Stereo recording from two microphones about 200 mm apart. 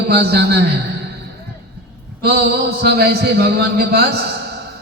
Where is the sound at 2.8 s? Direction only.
50° right (ahead or behind).